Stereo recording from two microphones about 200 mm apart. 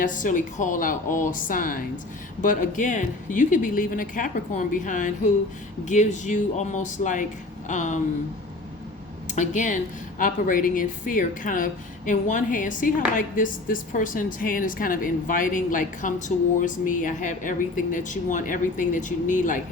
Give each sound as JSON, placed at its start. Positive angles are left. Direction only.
{"t": 0.0, "sound": "a woman's voice", "side_deg": 40}
{"t": 9.3, "sound": "a woman's voice", "side_deg": 40}